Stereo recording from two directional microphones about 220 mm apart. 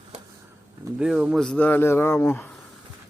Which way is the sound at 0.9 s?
5° right (ahead or behind).